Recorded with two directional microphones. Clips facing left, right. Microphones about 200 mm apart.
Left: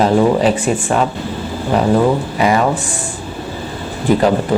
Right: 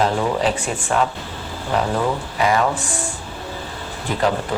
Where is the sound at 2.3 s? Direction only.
15° left (ahead or behind).